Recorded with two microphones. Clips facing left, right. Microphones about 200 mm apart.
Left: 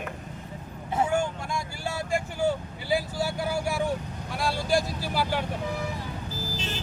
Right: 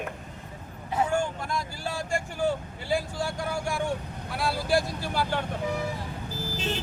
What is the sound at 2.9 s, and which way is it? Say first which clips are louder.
Speech: left 1 dB; 5° left (ahead or behind).